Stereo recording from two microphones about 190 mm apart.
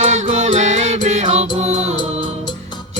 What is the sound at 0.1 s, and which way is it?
Music, 40° right (ahead or behind).